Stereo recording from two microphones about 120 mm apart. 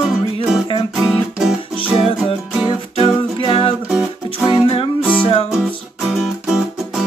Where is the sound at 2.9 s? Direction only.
45° left (ahead or behind).